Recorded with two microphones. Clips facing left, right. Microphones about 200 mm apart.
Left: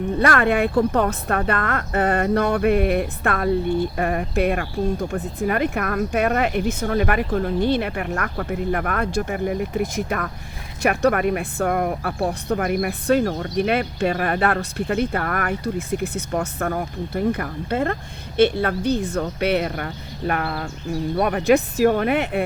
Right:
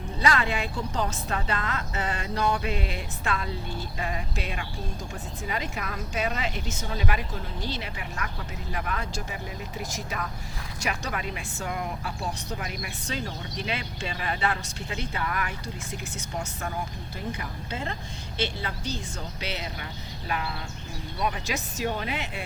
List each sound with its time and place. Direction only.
0.2 s speech: 60° left (ahead or behind)